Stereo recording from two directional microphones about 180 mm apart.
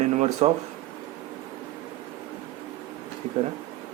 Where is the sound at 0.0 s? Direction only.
40° right (ahead or behind).